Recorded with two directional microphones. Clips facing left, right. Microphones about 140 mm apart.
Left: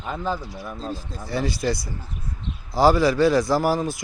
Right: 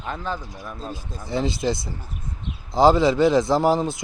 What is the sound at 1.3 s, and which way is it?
Speech, 20° right (ahead or behind).